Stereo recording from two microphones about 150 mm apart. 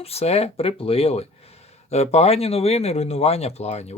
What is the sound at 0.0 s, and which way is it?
Speech, 45° left (ahead or behind).